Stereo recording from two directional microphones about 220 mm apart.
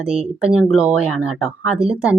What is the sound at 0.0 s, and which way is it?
Speech, 5° right (ahead or behind).